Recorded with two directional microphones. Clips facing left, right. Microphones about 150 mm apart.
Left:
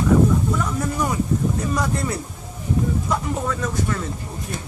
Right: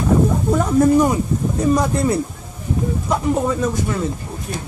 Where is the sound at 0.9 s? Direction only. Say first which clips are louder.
Right 6 dB; 25° right (ahead or behind).